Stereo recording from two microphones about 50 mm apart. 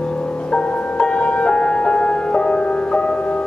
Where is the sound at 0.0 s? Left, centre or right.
Centre.